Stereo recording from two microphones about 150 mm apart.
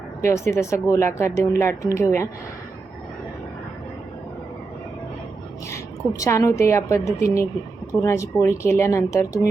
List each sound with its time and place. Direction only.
0.3 s speech: 20° left (ahead or behind)
5.7 s a woman's voice: 20° left (ahead or behind)